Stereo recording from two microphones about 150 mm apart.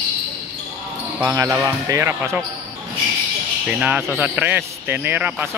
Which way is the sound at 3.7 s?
5° right (ahead or behind).